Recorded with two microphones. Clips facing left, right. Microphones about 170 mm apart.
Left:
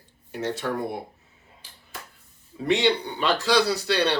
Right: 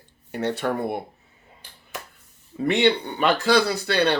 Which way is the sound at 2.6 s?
55° right (ahead or behind).